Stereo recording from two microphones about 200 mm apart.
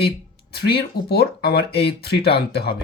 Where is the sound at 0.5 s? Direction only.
55° left (ahead or behind).